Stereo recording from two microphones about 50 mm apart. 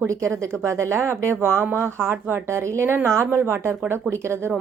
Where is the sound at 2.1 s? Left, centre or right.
Right.